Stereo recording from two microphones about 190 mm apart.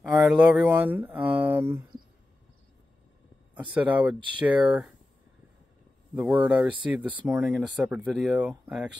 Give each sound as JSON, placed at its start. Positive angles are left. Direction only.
{"t": 0.0, "sound": "speech", "side_deg": -5}
{"t": 3.5, "sound": "speech", "side_deg": -10}
{"t": 6.1, "sound": "speech", "side_deg": -5}